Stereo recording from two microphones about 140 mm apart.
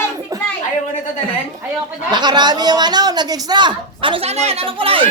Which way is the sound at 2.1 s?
30° right (ahead or behind).